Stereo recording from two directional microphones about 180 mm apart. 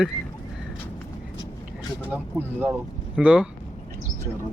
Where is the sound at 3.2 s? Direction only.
5° right (ahead or behind).